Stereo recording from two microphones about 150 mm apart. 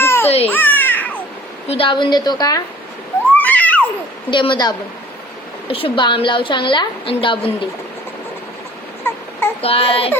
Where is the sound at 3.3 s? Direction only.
10° left (ahead or behind).